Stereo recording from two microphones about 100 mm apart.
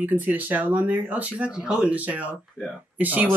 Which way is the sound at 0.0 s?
15° right (ahead or behind).